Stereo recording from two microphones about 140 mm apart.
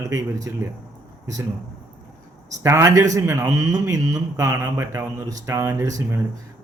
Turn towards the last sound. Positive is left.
turn(degrees=-20)  # may be behind; listen again after turning